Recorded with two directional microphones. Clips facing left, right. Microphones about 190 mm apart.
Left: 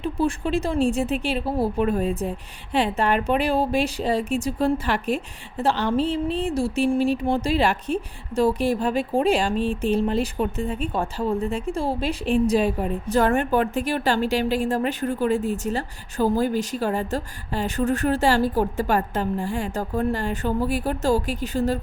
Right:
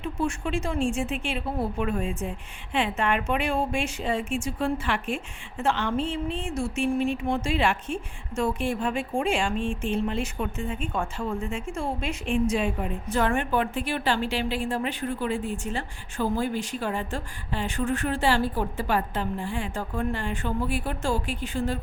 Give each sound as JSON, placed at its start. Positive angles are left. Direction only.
{"t": 0.0, "sound": "a woman's voice", "side_deg": 35}